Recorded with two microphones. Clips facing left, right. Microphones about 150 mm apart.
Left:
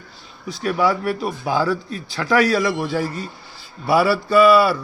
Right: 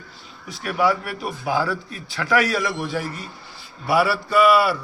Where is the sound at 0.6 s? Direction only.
30° left (ahead or behind).